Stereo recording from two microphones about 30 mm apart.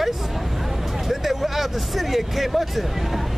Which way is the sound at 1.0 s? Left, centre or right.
Centre.